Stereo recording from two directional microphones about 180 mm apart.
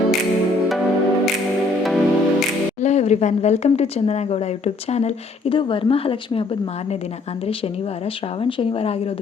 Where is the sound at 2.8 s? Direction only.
40° left (ahead or behind).